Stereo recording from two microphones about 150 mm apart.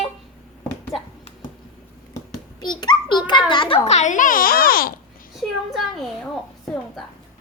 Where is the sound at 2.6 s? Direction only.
30° left (ahead or behind); by 4.9 s 80° left.